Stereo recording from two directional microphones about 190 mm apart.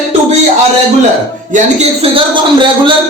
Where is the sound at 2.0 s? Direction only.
25° right (ahead or behind).